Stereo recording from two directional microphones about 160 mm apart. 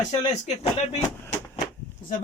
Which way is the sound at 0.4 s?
40° left (ahead or behind).